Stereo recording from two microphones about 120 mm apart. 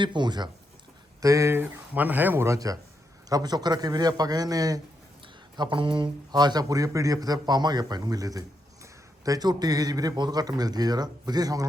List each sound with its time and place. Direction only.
0.0 s a man's voice: 40° right (ahead or behind)
1.2 s a man's voice: 25° right (ahead or behind)
5.5 s a man's voice: 45° right (ahead or behind)